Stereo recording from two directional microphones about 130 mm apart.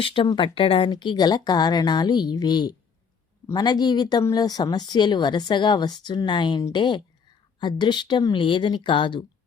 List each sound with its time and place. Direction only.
0.0 s speech: 40° left (ahead or behind)